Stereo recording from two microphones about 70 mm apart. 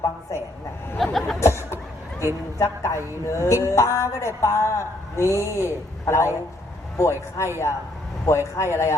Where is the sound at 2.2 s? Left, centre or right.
Left.